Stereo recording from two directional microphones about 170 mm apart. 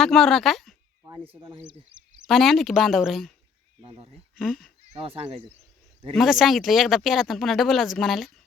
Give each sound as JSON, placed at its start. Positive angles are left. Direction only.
{"t": 0.0, "sound": "speech", "side_deg": 0}
{"t": 1.9, "sound": "speech", "side_deg": -5}
{"t": 3.8, "sound": "speech", "side_deg": -35}
{"t": 4.4, "sound": "speech", "side_deg": 0}
{"t": 4.9, "sound": "speech", "side_deg": -35}
{"t": 6.1, "sound": "speech", "side_deg": 0}